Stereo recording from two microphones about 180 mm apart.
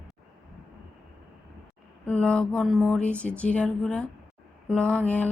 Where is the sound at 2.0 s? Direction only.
5° left (ahead or behind).